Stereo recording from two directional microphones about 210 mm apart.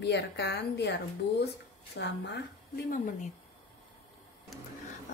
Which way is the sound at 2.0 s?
55° left (ahead or behind).